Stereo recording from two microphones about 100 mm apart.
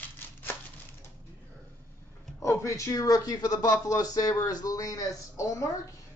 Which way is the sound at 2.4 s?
30° left (ahead or behind).